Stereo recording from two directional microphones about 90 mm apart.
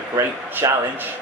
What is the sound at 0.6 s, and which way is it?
Speech, 40° right (ahead or behind).